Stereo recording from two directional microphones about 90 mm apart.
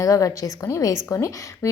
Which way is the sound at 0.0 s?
35° left (ahead or behind).